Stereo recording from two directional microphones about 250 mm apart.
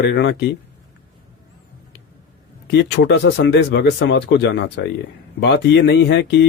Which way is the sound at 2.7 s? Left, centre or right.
Left.